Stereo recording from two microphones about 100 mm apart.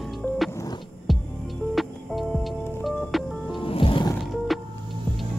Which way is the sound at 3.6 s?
60° left (ahead or behind).